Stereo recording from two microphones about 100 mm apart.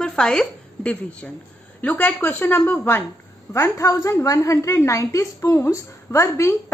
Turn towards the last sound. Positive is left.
turn(degrees=30)  # may be behind; listen again after turning